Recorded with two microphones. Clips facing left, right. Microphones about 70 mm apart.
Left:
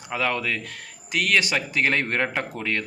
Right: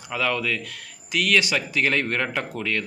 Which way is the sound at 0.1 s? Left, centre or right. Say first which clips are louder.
Right 1 dB; left.